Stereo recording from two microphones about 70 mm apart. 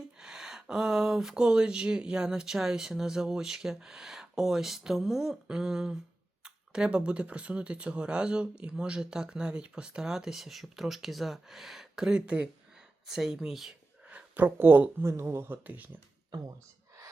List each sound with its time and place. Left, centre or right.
0.2 s speech: centre
13.1 s speech: centre
14.0 s speech: centre; by 15.5 s right
15.6 s speech: right